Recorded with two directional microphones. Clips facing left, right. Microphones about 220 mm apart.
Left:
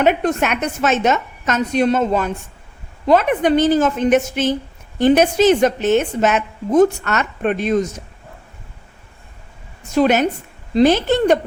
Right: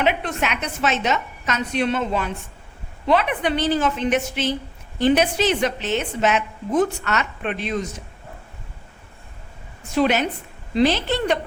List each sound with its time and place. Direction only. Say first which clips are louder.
0.0 s a woman's voice: left 6 dB; 45° left (ahead or behind)
9.9 s a woman's voice: left 5 dB; 45° left (ahead or behind)